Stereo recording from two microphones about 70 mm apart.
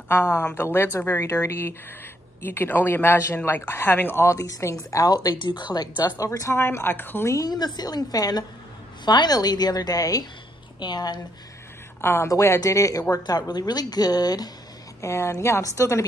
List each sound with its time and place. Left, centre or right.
0.1 s speech: left
4.9 s speech: left
6.5 s speech: left
7.2 s speech: left
9.0 s speech: left
10.8 s a woman's voice: left
12.0 s speech: left
12.3 s a woman's voice: left
13.1 s speech: left
15.0 s a woman's voice: left